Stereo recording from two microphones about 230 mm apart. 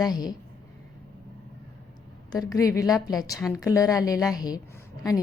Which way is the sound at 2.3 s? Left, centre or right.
Centre.